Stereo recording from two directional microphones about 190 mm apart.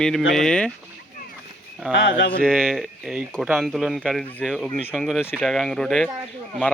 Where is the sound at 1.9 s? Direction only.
65° left (ahead or behind).